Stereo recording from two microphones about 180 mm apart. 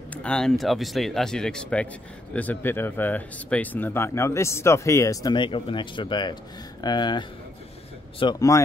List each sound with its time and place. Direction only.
0.1 s speech: 5° left (ahead or behind); by 8.5 s 20° left (ahead or behind)